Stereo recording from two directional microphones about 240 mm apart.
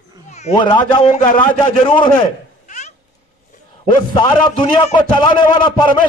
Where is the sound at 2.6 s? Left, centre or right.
Left.